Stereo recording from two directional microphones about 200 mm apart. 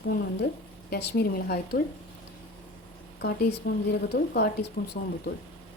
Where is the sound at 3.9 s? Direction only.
55° left (ahead or behind).